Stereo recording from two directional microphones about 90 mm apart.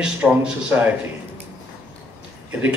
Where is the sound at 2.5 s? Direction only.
15° right (ahead or behind).